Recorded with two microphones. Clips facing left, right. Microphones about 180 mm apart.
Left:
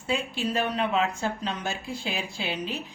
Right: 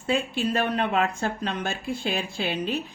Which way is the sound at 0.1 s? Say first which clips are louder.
Right 3 dB; 55° right (ahead or behind).